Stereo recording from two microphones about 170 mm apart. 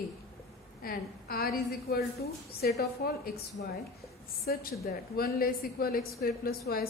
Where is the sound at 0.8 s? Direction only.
65° left (ahead or behind).